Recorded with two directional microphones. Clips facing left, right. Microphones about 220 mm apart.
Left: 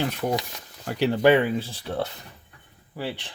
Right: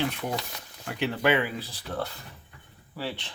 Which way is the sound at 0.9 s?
35° left (ahead or behind).